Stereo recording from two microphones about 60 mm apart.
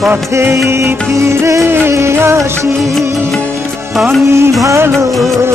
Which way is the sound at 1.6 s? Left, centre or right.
Right.